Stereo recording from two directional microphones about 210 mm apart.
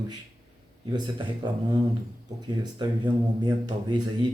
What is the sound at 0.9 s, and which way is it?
Speech, 20° right (ahead or behind).